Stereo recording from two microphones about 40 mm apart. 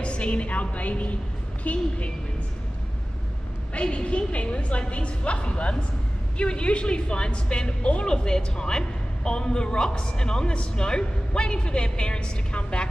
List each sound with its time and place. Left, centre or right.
0.0 s a woman's voice: left
3.7 s a woman's voice: left